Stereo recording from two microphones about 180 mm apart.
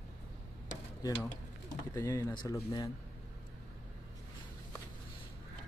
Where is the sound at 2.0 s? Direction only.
20° left (ahead or behind).